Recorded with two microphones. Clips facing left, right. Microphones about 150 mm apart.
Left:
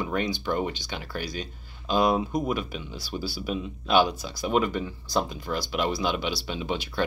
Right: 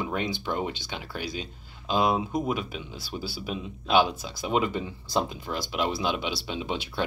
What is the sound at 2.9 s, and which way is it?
Speech, 55° right (ahead or behind).